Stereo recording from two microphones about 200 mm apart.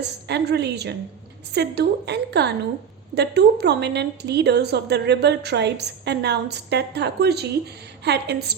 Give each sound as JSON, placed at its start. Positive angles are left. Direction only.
{"t": 0.3, "sound": "a woman's voice", "side_deg": -55}